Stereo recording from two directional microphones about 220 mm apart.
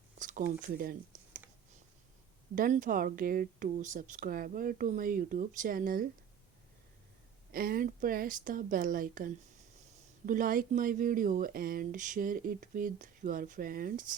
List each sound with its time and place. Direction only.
0.2 s a sound: 35° right (ahead or behind)
0.6 s speech: 40° right (ahead or behind)
2.6 s speech: 35° right (ahead or behind)
7.5 s speech: 40° right (ahead or behind)